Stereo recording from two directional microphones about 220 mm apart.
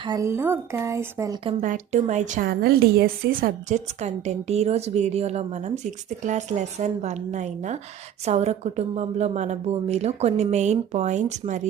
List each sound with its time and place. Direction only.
0.0 s a woman's voice: 15° right (ahead or behind)
1.5 s a woman's voice: 35° right (ahead or behind)